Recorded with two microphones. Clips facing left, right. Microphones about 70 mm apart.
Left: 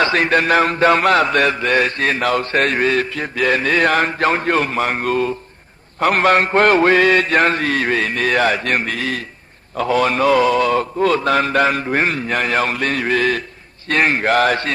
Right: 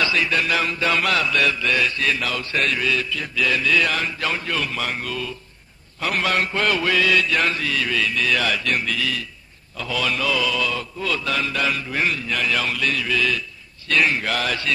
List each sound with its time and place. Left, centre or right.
0.0 s mantra: left